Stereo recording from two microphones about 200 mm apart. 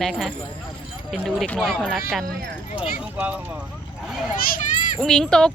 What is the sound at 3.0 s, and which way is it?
A child's voice, 5° right (ahead or behind).